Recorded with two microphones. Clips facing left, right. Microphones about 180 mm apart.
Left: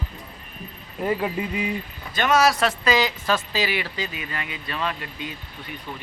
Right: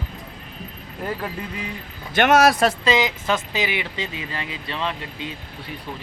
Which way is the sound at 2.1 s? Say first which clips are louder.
Right 4 dB; 70° right (ahead or behind).